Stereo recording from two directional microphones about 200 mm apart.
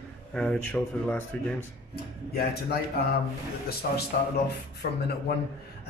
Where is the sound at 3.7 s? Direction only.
50° left (ahead or behind).